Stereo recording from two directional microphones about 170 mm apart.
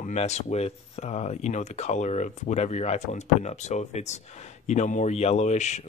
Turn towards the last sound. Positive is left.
turn(degrees=40)  # may be behind; listen again after turning